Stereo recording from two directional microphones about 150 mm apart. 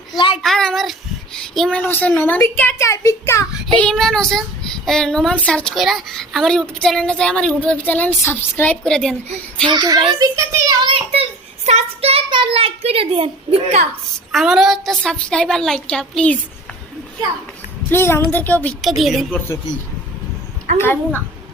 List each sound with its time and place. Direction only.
0.4 s child singing: centre (ahead or behind)
1.8 s speech: 10° left (ahead or behind)
3.7 s speech: 5° left (ahead or behind)
9.6 s a child's voice: 25° right (ahead or behind)
14.3 s speech: centre (ahead or behind)
17.9 s speech: 15° left (ahead or behind)
18.8 s speech: centre (ahead or behind)
20.7 s speech: 15° left (ahead or behind)